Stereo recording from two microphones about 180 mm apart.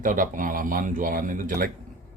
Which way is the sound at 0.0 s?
45° right (ahead or behind).